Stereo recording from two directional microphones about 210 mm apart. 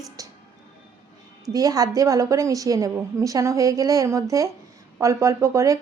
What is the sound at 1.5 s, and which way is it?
A woman's voice, 15° right (ahead or behind).